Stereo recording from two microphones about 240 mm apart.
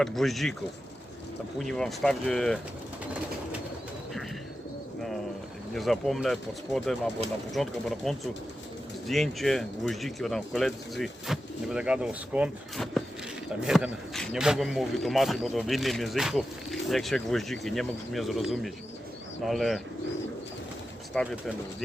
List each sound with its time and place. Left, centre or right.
0.0 s speech: centre
1.5 s speech: centre
5.7 s speech: centre
21.1 s speech: centre